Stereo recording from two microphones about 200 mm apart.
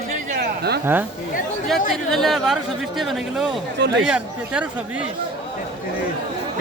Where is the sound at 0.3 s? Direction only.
55° right (ahead or behind).